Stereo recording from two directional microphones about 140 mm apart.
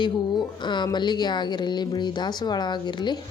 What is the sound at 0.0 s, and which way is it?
A woman's voice, 35° left (ahead or behind).